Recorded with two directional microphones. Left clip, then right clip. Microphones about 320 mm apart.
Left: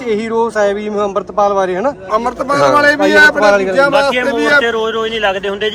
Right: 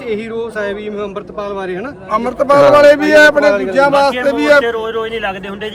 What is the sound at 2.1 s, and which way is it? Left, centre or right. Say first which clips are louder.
A man's voice: right 6 dB; centre.